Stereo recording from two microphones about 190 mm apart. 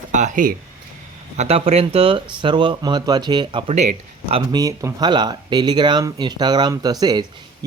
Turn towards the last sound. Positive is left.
turn(degrees=-20)  # may be behind; listen again after turning